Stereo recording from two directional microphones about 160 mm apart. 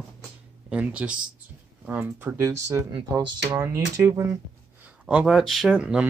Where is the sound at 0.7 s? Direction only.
5° right (ahead or behind).